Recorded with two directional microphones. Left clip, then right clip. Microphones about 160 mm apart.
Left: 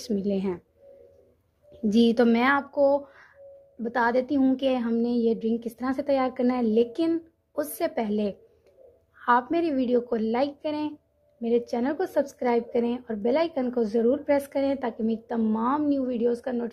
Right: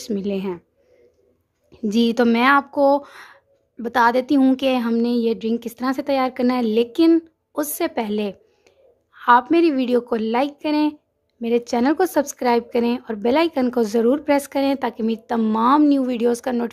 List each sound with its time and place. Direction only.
0.0 s speech: 10° right (ahead or behind)
1.7 s speech: 10° right (ahead or behind)
2.7 s speech: 25° right (ahead or behind)